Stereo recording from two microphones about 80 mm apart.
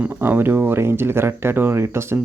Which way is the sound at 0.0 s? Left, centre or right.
Right.